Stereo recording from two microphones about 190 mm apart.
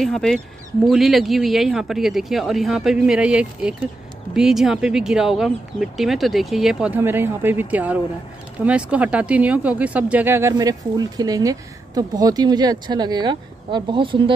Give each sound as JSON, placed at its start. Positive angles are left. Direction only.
{"t": 0.0, "sound": "speech", "side_deg": 0}